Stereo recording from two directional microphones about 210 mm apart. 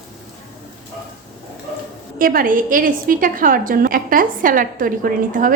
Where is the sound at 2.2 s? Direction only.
45° right (ahead or behind).